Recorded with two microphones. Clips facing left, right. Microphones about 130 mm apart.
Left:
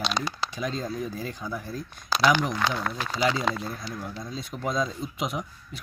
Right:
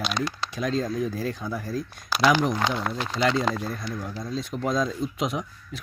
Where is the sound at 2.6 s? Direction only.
20° right (ahead or behind).